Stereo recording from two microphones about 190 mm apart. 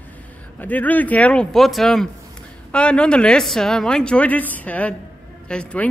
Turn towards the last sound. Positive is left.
turn(degrees=5)  # may be behind; listen again after turning